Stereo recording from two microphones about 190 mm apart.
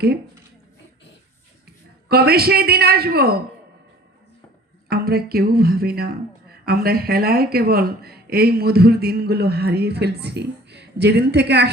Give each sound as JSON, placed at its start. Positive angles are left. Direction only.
{"t": 2.0, "sound": "speech", "side_deg": -55}
{"t": 4.9, "sound": "speech", "side_deg": -55}